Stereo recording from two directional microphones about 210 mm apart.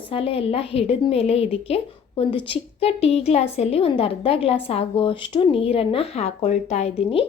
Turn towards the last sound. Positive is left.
turn(degrees=30)  # may be behind; listen again after turning